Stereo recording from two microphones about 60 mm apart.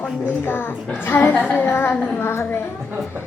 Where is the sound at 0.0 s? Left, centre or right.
Centre.